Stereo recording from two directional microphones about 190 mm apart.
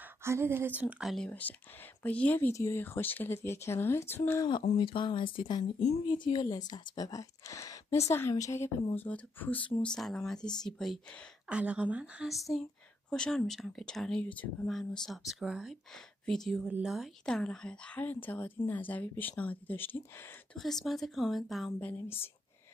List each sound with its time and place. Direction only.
0.2 s speech: 15° right (ahead or behind); by 4.5 s 15° left (ahead or behind)
4.7 s speech: 25° left (ahead or behind); by 9.6 s 10° left (ahead or behind)
9.6 s speech: 30° left (ahead or behind)
9.8 s a woman's voice: 5° left (ahead or behind)